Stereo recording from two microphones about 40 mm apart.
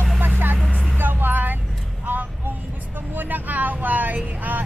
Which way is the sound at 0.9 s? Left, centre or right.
Right.